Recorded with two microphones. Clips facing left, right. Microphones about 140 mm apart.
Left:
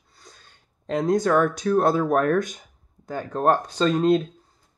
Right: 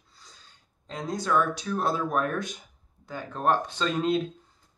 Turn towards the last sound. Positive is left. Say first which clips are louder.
# left 7 dB
turn(degrees=40)  # may be behind; listen again after turning